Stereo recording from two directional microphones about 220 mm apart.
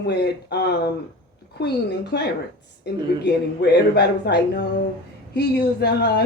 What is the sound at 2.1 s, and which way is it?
Speech, 50° left (ahead or behind).